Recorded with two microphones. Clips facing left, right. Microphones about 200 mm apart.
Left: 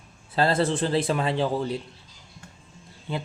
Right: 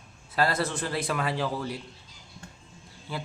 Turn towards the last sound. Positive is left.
turn(degrees=20)  # may be behind; listen again after turning